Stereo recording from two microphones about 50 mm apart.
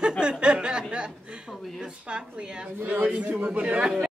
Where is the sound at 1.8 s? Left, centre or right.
Centre.